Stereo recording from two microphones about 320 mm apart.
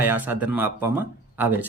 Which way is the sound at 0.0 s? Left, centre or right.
Centre.